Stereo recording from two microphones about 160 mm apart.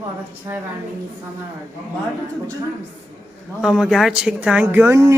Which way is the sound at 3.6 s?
5° right (ahead or behind).